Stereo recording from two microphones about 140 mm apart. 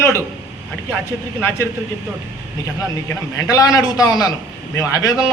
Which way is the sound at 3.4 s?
25° left (ahead or behind).